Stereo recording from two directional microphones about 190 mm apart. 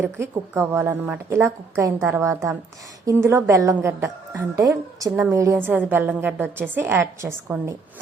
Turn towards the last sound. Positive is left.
turn(degrees=-15)  # may be behind; listen again after turning